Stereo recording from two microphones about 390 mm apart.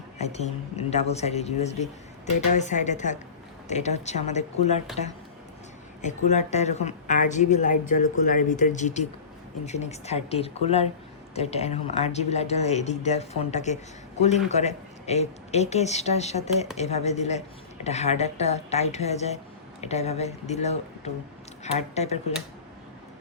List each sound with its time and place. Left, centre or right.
0.2 s a woman's voice: centre
6.0 s a woman's voice: centre